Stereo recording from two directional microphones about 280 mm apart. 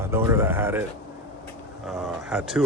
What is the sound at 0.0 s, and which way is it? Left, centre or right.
Speech, centre.